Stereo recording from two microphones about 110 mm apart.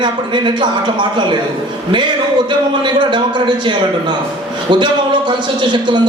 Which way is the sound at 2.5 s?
45° right (ahead or behind).